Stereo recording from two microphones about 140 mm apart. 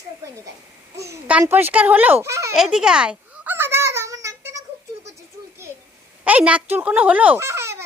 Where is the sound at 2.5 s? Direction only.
5° right (ahead or behind); by 4.6 s 20° right (ahead or behind).